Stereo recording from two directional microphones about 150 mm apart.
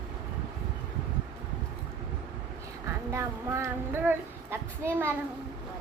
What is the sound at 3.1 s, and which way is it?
Speech, 15° right (ahead or behind).